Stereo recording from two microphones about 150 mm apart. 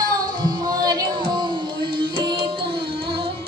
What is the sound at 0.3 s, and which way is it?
Music, 30° right (ahead or behind).